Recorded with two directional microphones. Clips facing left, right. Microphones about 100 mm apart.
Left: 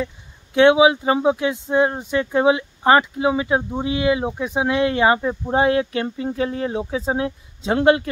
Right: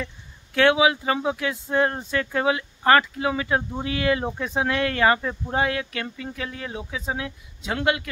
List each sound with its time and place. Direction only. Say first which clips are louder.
0.6 s speech: left 6 dB; 20° left (ahead or behind)